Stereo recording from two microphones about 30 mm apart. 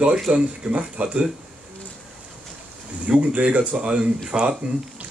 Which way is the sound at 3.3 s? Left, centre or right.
Right.